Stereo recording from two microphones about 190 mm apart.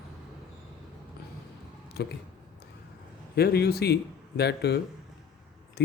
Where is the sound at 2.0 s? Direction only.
60° left (ahead or behind).